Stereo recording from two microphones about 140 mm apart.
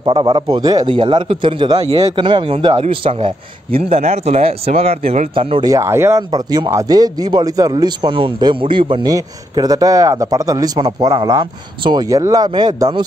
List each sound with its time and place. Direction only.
0.0 s a man's voice: 30° right (ahead or behind)
5.7 s speech: 20° right (ahead or behind); by 9.1 s 35° right (ahead or behind)
9.1 s speech: 25° right (ahead or behind)